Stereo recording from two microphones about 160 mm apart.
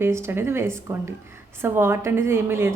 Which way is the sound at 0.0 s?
15° right (ahead or behind).